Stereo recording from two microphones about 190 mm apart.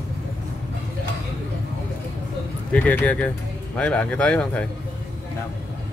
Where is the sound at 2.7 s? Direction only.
5° left (ahead or behind).